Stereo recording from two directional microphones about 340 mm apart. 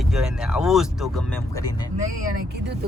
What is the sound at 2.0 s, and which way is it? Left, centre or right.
Speech, right.